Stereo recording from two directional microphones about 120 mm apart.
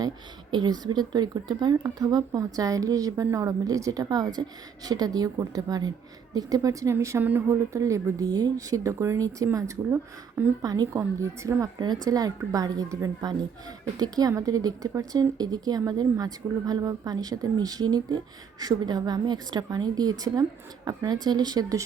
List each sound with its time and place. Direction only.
0.5 s speech: 35° right (ahead or behind); by 10.5 s 20° right (ahead or behind)
10.6 s speech: 30° right (ahead or behind)